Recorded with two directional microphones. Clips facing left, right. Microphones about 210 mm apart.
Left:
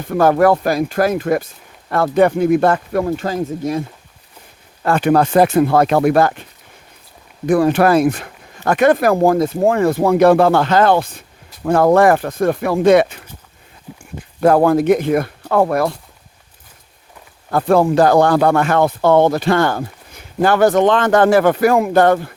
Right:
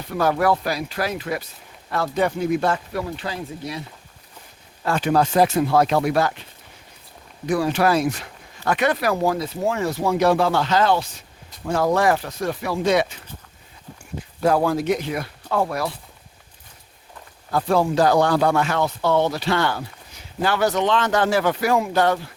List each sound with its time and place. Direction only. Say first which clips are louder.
0.0 s speech: left 8 dB; 50° left (ahead or behind)
4.8 s speech: left 6 dB; 60° left (ahead or behind)
7.4 s speech: left 7 dB; 55° left (ahead or behind)
13.9 s a sound: left 6 dB; 5° left (ahead or behind)
14.4 s speech: left 7 dB; 55° left (ahead or behind)
17.5 s speech: left 6 dB; 55° left (ahead or behind)